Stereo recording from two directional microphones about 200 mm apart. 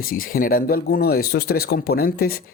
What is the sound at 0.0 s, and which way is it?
Speech, 45° left (ahead or behind).